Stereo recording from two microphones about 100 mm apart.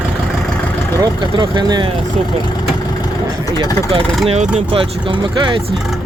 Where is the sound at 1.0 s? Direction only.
45° right (ahead or behind).